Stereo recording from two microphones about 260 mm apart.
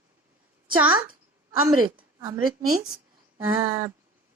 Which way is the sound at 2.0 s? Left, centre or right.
Centre.